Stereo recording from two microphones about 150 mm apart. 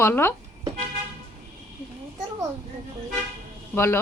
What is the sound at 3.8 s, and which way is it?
Speech, 15° left (ahead or behind).